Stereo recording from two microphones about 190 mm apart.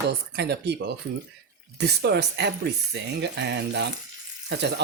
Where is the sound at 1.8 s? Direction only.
60° right (ahead or behind).